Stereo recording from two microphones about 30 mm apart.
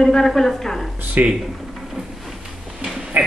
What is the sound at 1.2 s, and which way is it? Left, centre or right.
Speech, right.